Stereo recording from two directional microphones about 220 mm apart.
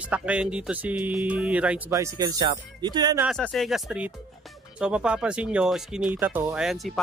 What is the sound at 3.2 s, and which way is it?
Speech, centre (ahead or behind).